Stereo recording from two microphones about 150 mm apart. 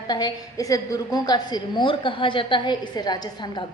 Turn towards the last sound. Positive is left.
turn(degrees=30)  # may be behind; listen again after turning